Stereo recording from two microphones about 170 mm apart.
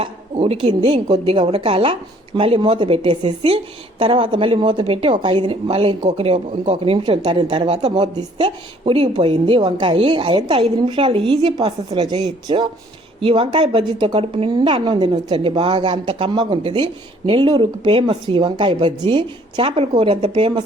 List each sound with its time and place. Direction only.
0.0 s a woman's voice: 35° right (ahead or behind)